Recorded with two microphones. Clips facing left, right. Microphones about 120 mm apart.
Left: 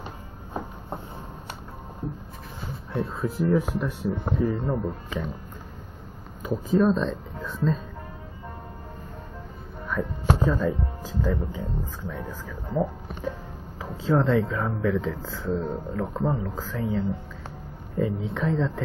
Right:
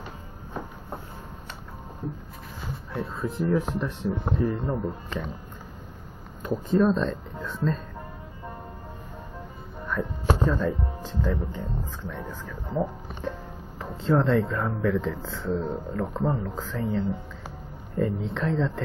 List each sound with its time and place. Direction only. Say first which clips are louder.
0.5 s a sound: left 2 dB; 25° left (ahead or behind)
2.9 s speech: left 3 dB; centre (ahead or behind)
6.4 s speech: left 1 dB; centre (ahead or behind)
9.8 s music: left 1 dB; 5° left (ahead or behind)
10.4 s speech: left 1 dB; 5° left (ahead or behind)